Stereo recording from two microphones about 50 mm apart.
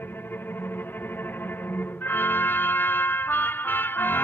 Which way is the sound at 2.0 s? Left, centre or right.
Left.